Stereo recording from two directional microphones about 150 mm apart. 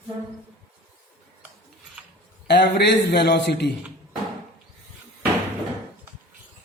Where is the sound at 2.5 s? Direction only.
90° left.